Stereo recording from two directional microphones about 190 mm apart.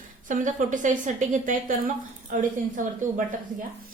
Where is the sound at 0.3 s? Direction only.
45° right (ahead or behind).